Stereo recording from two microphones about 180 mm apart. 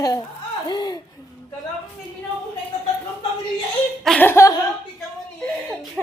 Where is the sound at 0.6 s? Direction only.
20° left (ahead or behind).